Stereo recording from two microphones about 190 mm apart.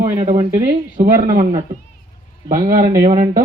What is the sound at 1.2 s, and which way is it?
Speech, 40° right (ahead or behind).